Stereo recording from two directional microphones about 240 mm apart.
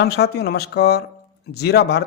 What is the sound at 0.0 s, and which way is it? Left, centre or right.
A man's voice, left.